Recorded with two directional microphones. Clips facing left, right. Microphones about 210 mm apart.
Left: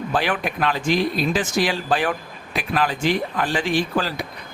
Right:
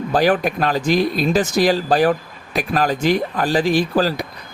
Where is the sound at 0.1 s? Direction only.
40° right (ahead or behind).